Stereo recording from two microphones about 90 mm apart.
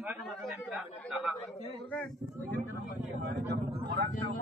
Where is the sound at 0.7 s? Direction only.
5° right (ahead or behind).